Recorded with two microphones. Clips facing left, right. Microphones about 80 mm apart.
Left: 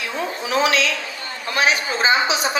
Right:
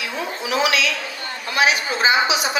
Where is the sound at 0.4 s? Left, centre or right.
Left.